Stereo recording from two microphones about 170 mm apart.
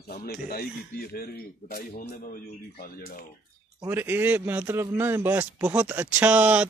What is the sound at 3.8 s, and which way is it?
Speech, 10° right (ahead or behind).